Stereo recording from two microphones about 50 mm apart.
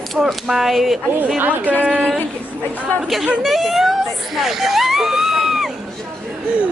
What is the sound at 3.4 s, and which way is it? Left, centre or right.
A man's voice, centre.